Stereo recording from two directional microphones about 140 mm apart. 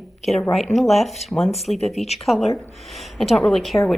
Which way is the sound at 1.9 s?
50° left (ahead or behind).